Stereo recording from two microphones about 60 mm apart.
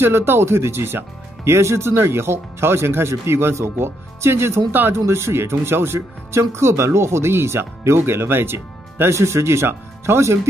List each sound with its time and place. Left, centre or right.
0.0 s speech: right
4.9 s speech: right